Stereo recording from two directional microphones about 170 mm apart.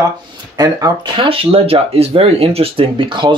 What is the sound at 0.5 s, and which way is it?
Speech, 25° right (ahead or behind).